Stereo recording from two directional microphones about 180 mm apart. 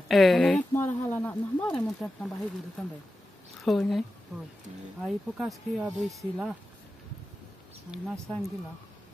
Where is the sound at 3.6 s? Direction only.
Centre (ahead or behind).